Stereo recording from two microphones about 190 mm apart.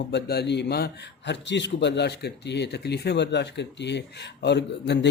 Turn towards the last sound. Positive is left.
turn(degrees=65)  # may be behind; listen again after turning